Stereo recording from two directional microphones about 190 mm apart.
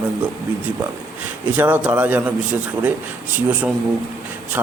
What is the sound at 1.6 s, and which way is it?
A man's voice, 10° right (ahead or behind).